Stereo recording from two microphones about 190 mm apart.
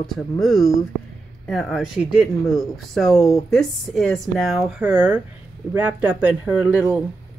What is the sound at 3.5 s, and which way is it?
Speech, centre (ahead or behind).